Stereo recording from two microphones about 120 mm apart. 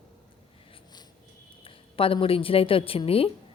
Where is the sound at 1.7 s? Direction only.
50° left (ahead or behind).